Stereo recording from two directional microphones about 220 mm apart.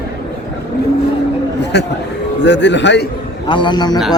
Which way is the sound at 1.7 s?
50° left (ahead or behind).